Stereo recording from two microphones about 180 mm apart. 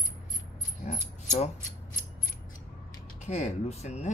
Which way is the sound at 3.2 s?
40° left (ahead or behind).